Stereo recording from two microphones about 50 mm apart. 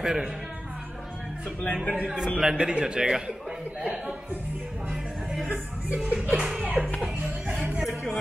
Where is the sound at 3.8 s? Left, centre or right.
Right.